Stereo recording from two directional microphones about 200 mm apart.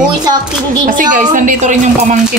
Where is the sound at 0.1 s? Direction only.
20° right (ahead or behind).